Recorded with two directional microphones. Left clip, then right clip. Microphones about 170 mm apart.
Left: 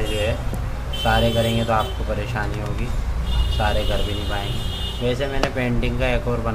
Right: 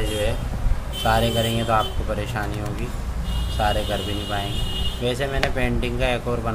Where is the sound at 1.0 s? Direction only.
20° right (ahead or behind).